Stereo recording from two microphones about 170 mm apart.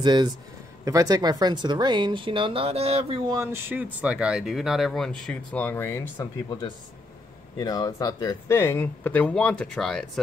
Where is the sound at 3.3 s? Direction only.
15° right (ahead or behind); by 6.5 s 15° left (ahead or behind).